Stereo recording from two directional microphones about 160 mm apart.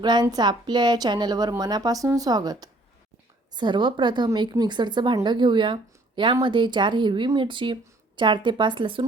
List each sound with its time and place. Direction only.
0.0 s a woman's voice: 25° right (ahead or behind)